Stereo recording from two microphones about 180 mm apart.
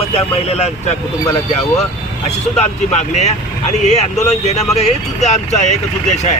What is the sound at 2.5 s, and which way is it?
Speech, 40° left (ahead or behind).